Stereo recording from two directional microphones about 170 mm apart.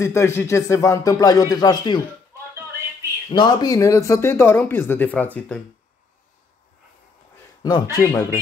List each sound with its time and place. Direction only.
0.0 s speech: 15° left (ahead or behind)
3.3 s speech: 25° left (ahead or behind); by 5.6 s 10° left (ahead or behind)
7.9 s speech: 15° left (ahead or behind)